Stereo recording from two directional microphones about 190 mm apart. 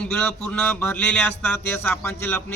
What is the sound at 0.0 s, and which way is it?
A man's voice, 5° left (ahead or behind).